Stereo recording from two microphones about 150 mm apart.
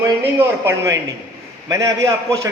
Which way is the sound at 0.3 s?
20° right (ahead or behind).